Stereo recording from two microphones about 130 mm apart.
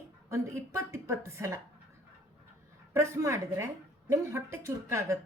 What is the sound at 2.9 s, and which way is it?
Speech, 20° right (ahead or behind).